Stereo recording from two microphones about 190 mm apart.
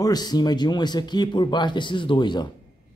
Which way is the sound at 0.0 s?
20° left (ahead or behind).